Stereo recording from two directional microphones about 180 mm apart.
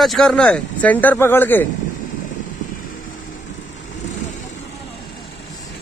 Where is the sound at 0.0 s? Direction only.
Centre (ahead or behind).